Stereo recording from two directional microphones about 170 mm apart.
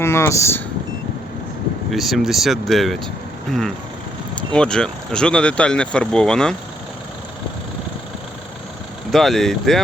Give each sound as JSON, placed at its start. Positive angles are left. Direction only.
{"t": 0.0, "sound": "speech", "side_deg": 15}
{"t": 1.9, "sound": "speech", "side_deg": 0}
{"t": 4.5, "sound": "speech", "side_deg": 5}
{"t": 9.1, "sound": "speech", "side_deg": 0}